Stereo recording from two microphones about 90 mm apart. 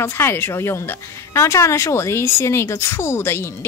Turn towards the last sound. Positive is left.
turn(degrees=30)  # may be behind; listen again after turning